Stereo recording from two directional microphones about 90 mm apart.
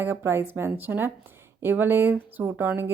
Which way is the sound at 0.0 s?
25° right (ahead or behind).